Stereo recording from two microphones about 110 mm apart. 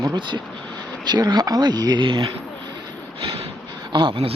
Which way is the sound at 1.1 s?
40° right (ahead or behind).